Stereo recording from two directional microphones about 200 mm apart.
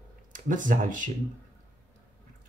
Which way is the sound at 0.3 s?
40° right (ahead or behind).